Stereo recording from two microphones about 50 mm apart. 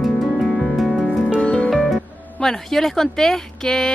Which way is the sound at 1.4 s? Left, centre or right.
Left.